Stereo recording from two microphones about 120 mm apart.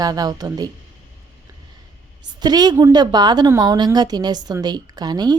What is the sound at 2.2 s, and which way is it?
A woman's voice, 35° right (ahead or behind).